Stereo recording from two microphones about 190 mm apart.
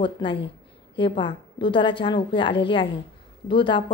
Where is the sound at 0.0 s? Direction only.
25° left (ahead or behind).